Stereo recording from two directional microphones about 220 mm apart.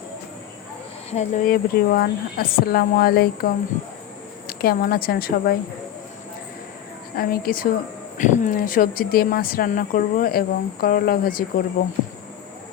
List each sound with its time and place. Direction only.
1.1 s speech: 35° left (ahead or behind)
7.2 s speech: 40° left (ahead or behind)